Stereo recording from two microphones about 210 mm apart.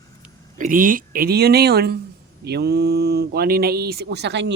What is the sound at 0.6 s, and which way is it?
Speech, 40° right (ahead or behind).